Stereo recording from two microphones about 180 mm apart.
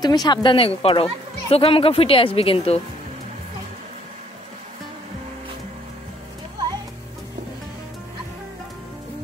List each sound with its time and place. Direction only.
0.0 s speech: 20° left (ahead or behind)